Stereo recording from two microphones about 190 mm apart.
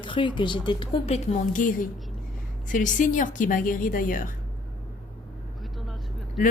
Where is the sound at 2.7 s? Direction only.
45° left (ahead or behind).